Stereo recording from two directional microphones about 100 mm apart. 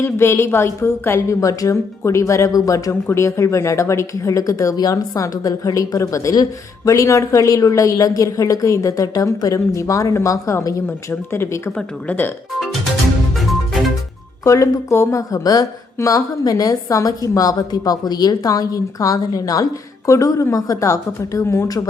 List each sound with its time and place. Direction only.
0.0 s speech: 25° left (ahead or behind)
10.8 s speech: 25° left (ahead or behind)
14.4 s speech: 30° left (ahead or behind)